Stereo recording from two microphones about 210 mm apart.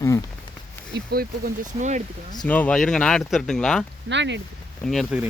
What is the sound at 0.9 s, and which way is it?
Speech, 45° right (ahead or behind).